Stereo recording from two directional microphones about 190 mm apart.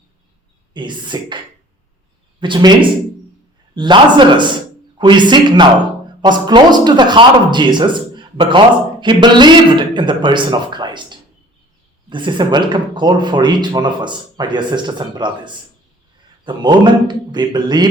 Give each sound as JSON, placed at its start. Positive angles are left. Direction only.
{"t": 0.7, "sound": "a man's voice", "side_deg": -25}
{"t": 2.4, "sound": "a man's voice", "side_deg": -25}
{"t": 3.8, "sound": "a man's voice", "side_deg": -25}
{"t": 16.4, "sound": "a man's voice", "side_deg": -25}